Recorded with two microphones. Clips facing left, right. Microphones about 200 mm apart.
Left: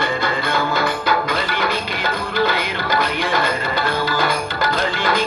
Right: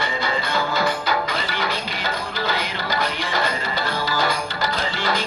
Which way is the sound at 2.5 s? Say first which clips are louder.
Left 4 dB; 55° left (ahead or behind).